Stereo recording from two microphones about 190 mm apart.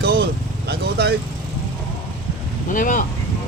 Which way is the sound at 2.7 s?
45° left (ahead or behind).